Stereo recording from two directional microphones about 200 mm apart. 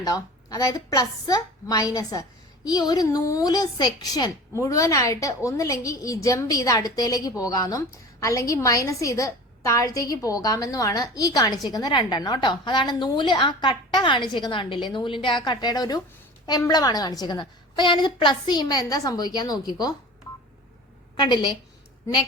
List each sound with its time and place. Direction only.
0.0 s a woman's voice: 20° left (ahead or behind)
21.2 s a woman's voice: 20° left (ahead or behind)